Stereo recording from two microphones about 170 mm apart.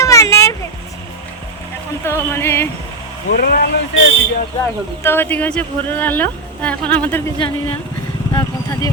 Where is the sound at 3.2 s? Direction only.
60° left (ahead or behind).